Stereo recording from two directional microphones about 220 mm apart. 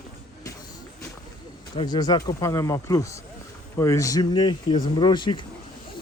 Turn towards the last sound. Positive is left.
turn(degrees=20)  # may be behind; listen again after turning